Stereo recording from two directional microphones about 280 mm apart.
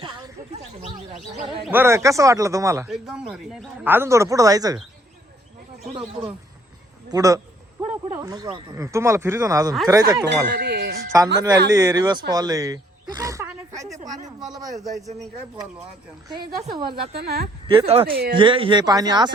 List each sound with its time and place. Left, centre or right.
0.0 s a sound: centre
0.8 s speech: right
1.6 s speech: centre
7.1 s a sound: centre
8.1 s speech: centre
10.5 s a sound: right
11.1 s speech: centre
14.5 s speech: centre
14.9 s speech: centre
16.7 s speech: centre
17.2 s speech: right
17.7 s speech: centre